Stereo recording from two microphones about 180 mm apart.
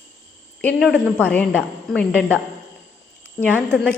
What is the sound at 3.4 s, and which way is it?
Speech, 10° left (ahead or behind).